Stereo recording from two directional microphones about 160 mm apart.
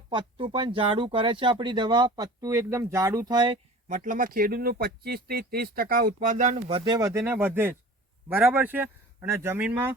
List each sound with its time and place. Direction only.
0.1 s speech: 35° right (ahead or behind)
3.8 s speech: 55° right (ahead or behind)
6.7 s speech: 30° right (ahead or behind)
7.1 s speech: 15° right (ahead or behind)